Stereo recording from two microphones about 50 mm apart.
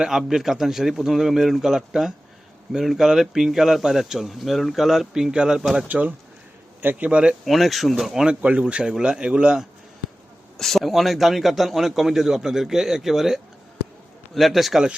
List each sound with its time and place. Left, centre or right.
0.0 s speech: centre
5.9 s speech: right
7.4 s a man's voice: centre
8.4 s speech: right
10.6 s a man's voice: centre